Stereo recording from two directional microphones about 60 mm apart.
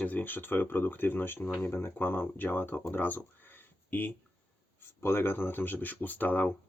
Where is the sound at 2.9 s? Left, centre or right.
Left.